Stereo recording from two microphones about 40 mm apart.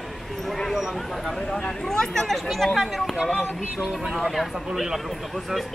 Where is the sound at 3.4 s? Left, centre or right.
Centre.